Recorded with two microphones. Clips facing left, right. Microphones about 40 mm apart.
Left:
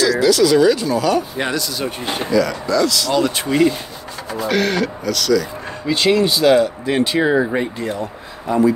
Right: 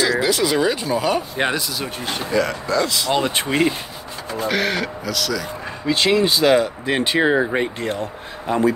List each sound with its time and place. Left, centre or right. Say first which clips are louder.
0.0 s speech: left 4 dB; right
1.8 s speech: left 3 dB; centre
2.3 s speech: left 3 dB; right
4.5 s speech: left 3 dB; centre
7.0 s speech: left 2 dB; right
8.5 s speech: left 3 dB; right